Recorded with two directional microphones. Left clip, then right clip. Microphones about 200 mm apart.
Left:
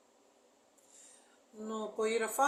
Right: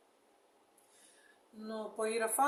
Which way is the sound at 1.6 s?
15° right (ahead or behind).